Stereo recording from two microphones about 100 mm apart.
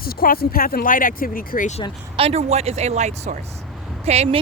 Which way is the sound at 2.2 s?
90° right.